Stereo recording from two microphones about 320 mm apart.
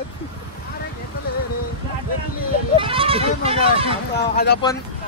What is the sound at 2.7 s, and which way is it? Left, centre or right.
Speech, centre.